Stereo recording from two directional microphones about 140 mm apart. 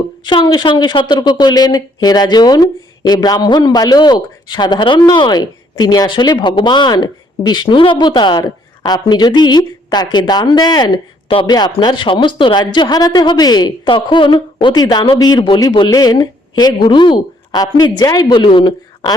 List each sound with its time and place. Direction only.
0.3 s a woman's voice: 35° left (ahead or behind)